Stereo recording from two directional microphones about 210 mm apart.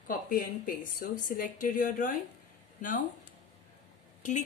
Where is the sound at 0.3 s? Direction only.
45° left (ahead or behind).